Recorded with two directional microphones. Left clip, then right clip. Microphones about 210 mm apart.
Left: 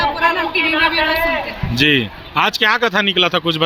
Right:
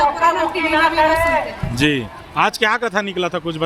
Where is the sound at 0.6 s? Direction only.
35° right (ahead or behind).